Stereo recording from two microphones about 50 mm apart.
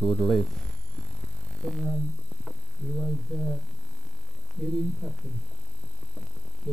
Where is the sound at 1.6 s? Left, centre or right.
Centre.